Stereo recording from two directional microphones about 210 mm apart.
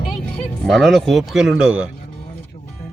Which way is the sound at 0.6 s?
Centre (ahead or behind).